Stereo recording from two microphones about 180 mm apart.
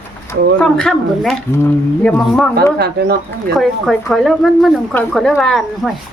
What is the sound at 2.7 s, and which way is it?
Speech, 60° right (ahead or behind).